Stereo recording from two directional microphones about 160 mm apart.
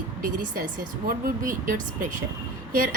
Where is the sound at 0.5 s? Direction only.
65° right (ahead or behind).